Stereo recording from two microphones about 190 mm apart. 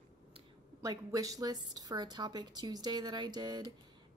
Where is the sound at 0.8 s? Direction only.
20° right (ahead or behind).